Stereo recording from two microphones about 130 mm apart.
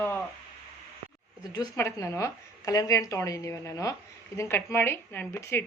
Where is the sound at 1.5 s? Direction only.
25° left (ahead or behind).